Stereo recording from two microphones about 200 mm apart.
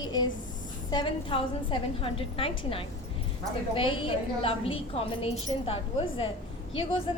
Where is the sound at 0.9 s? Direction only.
25° left (ahead or behind).